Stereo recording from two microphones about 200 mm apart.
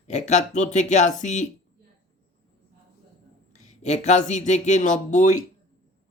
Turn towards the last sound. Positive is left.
turn(degrees=40)  # may be behind; listen again after turning